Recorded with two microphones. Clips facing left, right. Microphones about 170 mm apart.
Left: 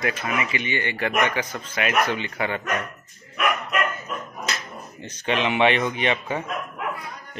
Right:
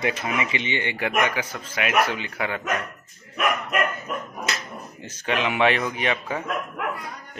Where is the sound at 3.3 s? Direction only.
45° right (ahead or behind).